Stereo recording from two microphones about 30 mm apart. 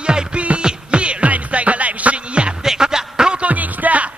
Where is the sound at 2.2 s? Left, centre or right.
Right.